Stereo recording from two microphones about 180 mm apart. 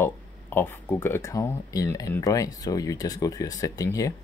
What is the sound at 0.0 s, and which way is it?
Speech, 10° left (ahead or behind).